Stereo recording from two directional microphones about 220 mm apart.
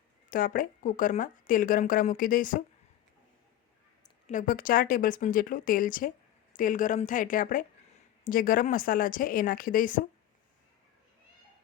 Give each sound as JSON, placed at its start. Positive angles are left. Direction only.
{"t": 0.3, "sound": "speech", "side_deg": 40}
{"t": 4.3, "sound": "speech", "side_deg": 35}